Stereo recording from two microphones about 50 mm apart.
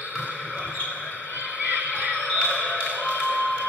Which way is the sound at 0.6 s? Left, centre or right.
Left.